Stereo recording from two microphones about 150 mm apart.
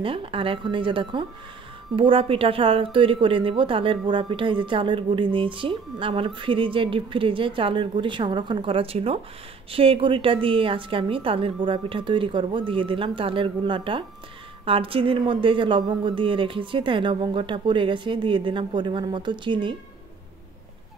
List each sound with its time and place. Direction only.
0.0 s a woman's voice: 35° right (ahead or behind)